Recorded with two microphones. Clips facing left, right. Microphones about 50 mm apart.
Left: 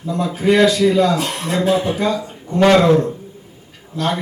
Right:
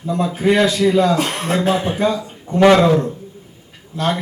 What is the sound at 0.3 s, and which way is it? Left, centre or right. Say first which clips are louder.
A man's voice: left 2 dB; right.